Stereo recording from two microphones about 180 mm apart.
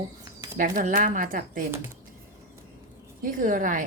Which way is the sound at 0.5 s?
50° right (ahead or behind).